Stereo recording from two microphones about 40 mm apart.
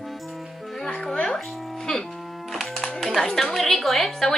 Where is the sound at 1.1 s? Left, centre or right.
Left.